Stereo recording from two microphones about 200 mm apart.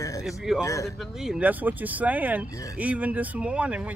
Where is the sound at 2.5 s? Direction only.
15° left (ahead or behind).